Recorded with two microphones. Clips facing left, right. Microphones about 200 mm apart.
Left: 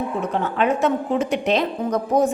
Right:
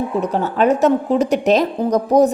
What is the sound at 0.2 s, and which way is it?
A woman's voice, 40° right (ahead or behind).